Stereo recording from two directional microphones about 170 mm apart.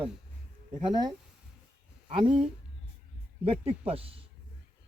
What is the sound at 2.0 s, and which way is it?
Speech, 30° right (ahead or behind).